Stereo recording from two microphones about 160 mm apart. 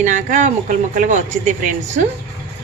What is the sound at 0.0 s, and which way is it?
A woman's voice, 55° right (ahead or behind).